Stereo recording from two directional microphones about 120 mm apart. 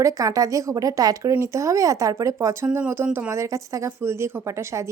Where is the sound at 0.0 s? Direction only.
25° right (ahead or behind).